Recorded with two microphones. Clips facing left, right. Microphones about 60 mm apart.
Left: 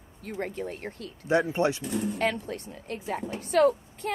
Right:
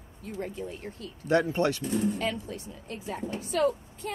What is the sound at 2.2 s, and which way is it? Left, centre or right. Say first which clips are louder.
A woman's voice: left 4 dB; left.